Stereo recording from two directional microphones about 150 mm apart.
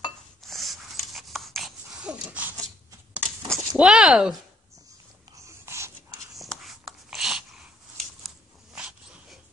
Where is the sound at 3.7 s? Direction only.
5° right (ahead or behind).